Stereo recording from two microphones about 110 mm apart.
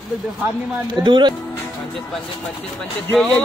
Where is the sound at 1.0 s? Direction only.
45° right (ahead or behind).